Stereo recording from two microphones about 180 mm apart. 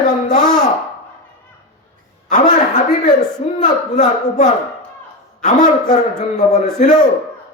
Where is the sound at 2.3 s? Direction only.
45° left (ahead or behind).